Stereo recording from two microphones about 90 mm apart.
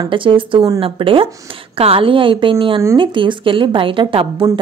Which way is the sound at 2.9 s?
65° right (ahead or behind).